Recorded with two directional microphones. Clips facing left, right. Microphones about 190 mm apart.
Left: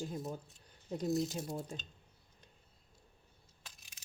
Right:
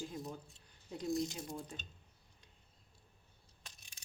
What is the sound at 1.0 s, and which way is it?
Speech, centre (ahead or behind).